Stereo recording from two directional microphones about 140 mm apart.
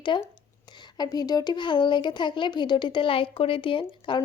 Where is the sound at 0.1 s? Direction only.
35° left (ahead or behind).